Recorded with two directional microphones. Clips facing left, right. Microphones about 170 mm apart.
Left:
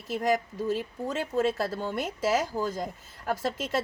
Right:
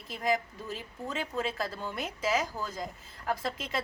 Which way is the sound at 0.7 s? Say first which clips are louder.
Left 7 dB; 45° left (ahead or behind).